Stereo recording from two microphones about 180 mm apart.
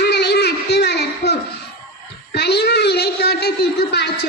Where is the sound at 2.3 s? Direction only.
65° left (ahead or behind).